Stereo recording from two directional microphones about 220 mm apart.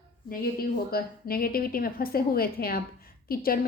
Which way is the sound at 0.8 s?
45° left (ahead or behind).